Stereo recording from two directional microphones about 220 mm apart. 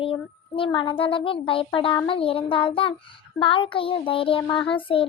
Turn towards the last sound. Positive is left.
turn(degrees=25)  # may be behind; listen again after turning